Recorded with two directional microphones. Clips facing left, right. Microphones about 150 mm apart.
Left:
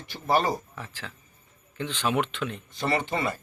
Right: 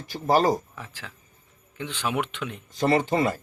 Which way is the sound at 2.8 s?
45° right (ahead or behind).